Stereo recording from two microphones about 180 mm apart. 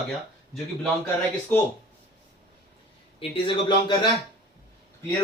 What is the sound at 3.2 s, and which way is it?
Speech, 30° left (ahead or behind).